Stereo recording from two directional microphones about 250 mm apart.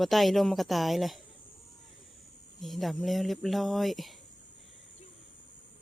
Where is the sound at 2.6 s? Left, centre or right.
Centre.